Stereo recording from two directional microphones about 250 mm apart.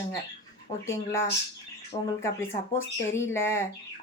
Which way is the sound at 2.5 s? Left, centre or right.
Centre.